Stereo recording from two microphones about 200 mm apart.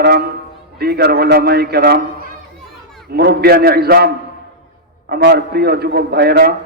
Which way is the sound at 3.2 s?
50° right (ahead or behind).